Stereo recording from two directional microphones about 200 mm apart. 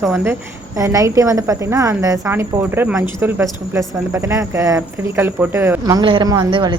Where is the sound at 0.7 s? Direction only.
15° right (ahead or behind).